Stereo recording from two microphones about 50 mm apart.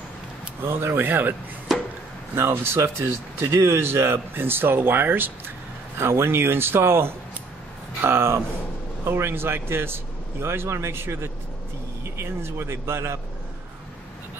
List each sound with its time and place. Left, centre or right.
0.6 s speech: right
1.7 s a sound: centre
2.3 s speech: right
5.9 s speech: right